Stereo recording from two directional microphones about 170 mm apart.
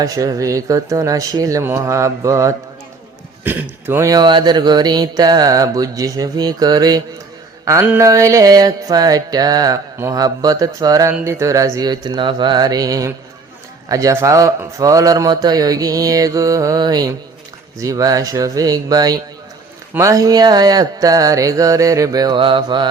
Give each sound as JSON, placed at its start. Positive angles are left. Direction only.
{"t": 0.0, "sound": "mantra", "side_deg": -20}